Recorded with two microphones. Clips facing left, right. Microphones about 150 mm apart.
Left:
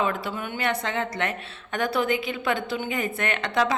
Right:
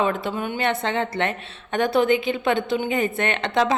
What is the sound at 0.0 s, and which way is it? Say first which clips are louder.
A woman's voice: right 4 dB; 25° right (ahead or behind).